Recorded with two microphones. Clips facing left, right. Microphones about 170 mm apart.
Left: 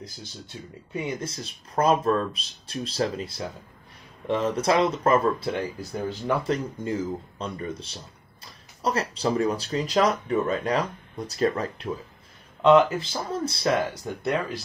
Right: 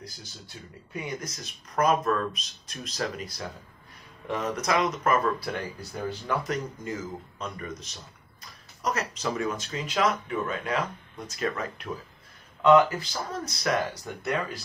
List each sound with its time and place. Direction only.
0.5 s speech: 15° left (ahead or behind)